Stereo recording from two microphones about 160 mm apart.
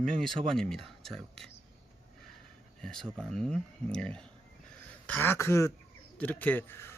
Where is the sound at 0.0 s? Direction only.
5° left (ahead or behind).